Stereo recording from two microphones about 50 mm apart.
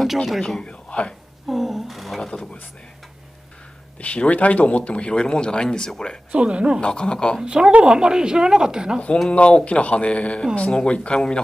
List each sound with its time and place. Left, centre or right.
0.0 s a man's voice: centre
0.6 s speech: left
1.5 s speech: centre
4.0 s speech: left
6.3 s speech: right
6.8 s speech: centre
7.4 s a woman's voice: centre
9.3 s speech: left